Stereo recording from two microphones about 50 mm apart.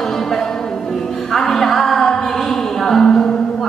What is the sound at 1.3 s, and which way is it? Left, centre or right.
Music, centre.